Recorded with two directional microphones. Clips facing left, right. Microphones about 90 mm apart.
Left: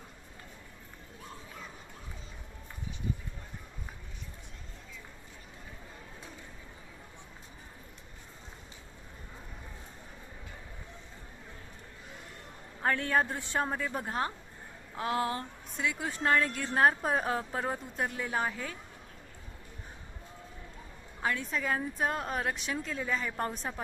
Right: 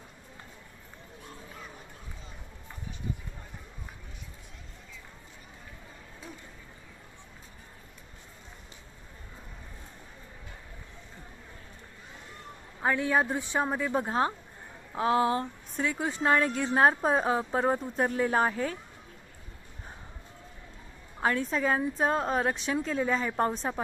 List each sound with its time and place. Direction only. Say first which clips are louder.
12.8 s a man's voice: right 2 dB; 10° right (ahead or behind); by 18.8 s 35° right (ahead or behind)
21.2 s a woman's voice: right 5 dB; 35° right (ahead or behind)